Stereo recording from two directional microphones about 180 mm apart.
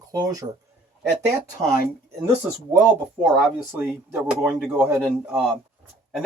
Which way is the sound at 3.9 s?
5° right (ahead or behind).